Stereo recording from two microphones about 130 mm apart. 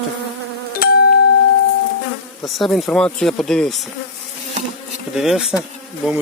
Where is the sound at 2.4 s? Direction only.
Centre (ahead or behind).